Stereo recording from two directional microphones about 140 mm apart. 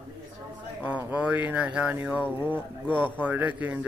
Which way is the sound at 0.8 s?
10° right (ahead or behind).